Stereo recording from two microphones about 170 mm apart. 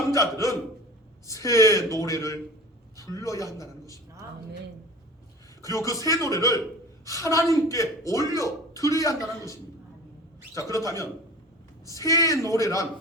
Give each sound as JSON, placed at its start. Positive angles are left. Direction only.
{"t": 0.1, "sound": "a woman's voice", "side_deg": 20}
{"t": 5.6, "sound": "a woman's voice", "side_deg": 20}
{"t": 10.5, "sound": "a woman's voice", "side_deg": 20}